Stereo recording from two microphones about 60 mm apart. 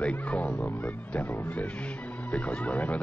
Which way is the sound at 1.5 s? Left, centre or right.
Left.